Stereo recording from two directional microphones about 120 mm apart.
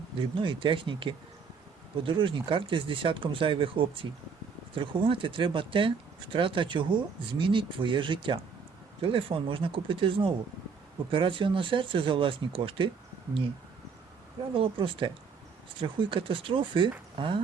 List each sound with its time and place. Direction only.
0.2 s speech: 45° right (ahead or behind)
14.5 s speech: 45° right (ahead or behind)